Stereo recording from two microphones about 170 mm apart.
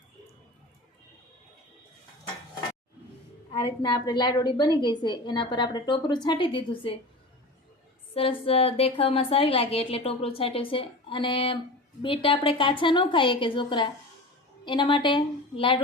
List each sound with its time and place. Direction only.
3.5 s a woman's voice: 30° left (ahead or behind)
8.1 s a woman's voice: 35° left (ahead or behind)